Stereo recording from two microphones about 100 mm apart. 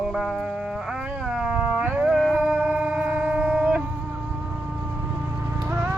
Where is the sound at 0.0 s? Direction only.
5° right (ahead or behind).